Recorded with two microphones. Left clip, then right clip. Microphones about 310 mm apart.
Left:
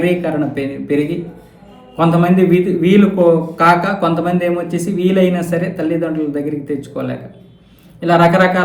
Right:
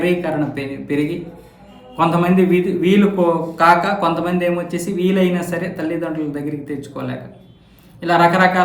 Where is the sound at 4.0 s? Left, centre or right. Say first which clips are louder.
Left 2 dB; right.